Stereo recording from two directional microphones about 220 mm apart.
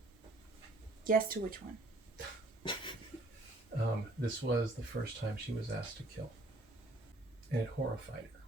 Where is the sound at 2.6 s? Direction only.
20° left (ahead or behind).